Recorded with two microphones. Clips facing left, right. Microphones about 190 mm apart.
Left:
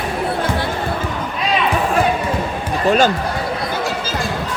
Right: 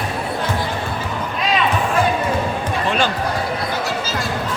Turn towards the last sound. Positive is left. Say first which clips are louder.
# left 6 dB
turn(degrees=45)  # may be behind; listen again after turning